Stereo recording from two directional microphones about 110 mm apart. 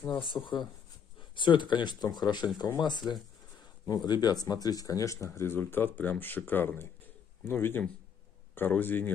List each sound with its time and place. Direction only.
0.1 s speech: 45° left (ahead or behind); by 9.1 s 15° left (ahead or behind)